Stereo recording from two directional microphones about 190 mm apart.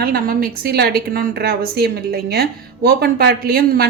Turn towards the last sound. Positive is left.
turn(degrees=-50)  # may be behind; listen again after turning